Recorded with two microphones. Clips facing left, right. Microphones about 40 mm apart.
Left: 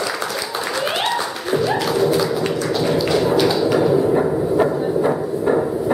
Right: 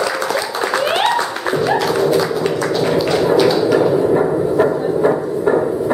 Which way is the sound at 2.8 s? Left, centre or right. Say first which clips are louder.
Right 2 dB; centre.